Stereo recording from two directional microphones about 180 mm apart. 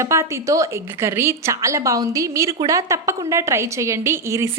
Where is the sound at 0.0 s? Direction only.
15° right (ahead or behind).